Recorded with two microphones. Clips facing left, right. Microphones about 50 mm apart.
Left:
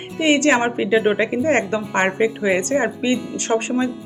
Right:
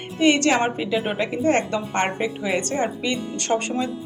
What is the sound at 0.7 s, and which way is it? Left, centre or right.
A woman's voice, left.